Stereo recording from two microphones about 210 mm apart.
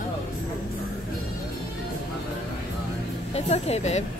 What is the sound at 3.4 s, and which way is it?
Speech, 30° left (ahead or behind).